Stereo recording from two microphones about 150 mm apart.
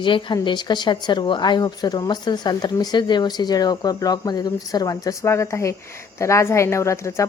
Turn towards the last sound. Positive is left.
turn(degrees=20)  # may be behind; listen again after turning